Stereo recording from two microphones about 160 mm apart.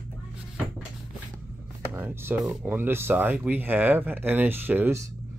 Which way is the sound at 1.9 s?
10° right (ahead or behind).